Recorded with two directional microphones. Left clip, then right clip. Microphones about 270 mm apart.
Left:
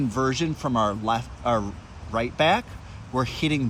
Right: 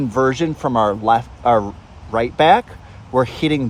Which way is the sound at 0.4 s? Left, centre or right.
Right.